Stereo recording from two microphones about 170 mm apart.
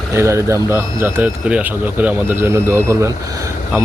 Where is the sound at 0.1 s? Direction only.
15° right (ahead or behind).